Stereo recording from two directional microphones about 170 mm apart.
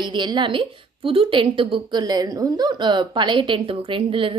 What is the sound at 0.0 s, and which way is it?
A woman's voice, 25° right (ahead or behind).